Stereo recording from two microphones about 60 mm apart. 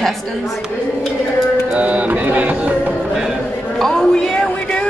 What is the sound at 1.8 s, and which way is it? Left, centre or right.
Music, right.